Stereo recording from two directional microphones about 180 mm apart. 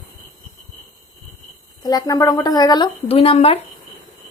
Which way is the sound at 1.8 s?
20° left (ahead or behind).